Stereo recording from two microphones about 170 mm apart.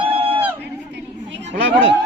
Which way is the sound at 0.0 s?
30° right (ahead or behind).